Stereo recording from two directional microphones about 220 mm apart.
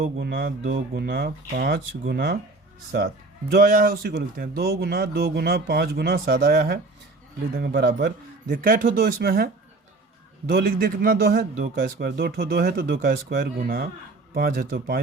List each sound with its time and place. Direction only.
0.0 s a man's voice: 45° right (ahead or behind)
10.5 s a man's voice: 40° right (ahead or behind)